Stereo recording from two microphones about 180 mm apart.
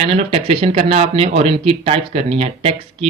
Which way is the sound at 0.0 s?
35° right (ahead or behind).